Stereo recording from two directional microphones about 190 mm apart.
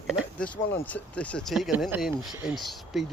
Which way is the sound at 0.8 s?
10° left (ahead or behind).